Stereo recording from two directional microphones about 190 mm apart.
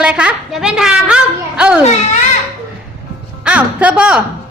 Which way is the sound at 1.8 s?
35° left (ahead or behind).